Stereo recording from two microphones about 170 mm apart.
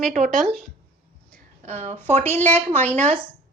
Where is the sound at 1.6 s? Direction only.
40° right (ahead or behind).